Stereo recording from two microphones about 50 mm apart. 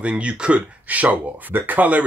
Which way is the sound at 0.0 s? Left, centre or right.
Right.